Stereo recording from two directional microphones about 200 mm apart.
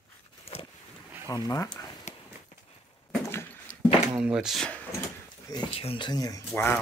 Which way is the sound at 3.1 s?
10° left (ahead or behind).